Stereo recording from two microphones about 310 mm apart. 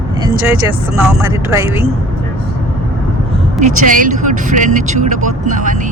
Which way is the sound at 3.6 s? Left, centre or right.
Right.